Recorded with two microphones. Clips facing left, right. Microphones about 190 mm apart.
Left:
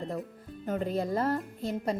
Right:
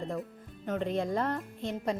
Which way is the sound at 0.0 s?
Centre (ahead or behind).